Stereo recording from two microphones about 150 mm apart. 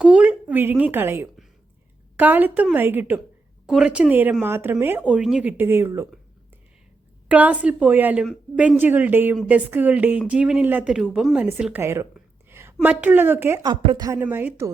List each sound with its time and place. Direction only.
0.0 s speech: 10° right (ahead or behind)
7.3 s a woman's voice: 10° right (ahead or behind); by 14.2 s 25° right (ahead or behind)
14.2 s speech: 10° right (ahead or behind)